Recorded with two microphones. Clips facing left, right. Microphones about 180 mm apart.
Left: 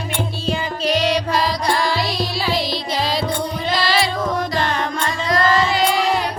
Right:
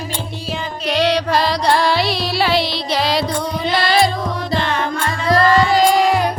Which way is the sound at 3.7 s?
60° right (ahead or behind).